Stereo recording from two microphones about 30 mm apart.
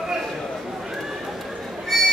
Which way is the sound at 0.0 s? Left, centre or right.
Centre.